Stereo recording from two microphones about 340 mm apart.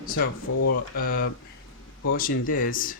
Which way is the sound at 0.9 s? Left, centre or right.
Left.